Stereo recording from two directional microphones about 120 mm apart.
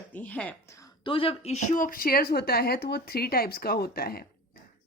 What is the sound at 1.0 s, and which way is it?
A woman's voice, 50° left (ahead or behind).